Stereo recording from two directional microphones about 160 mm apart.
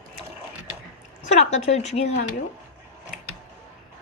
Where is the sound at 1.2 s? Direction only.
45° left (ahead or behind).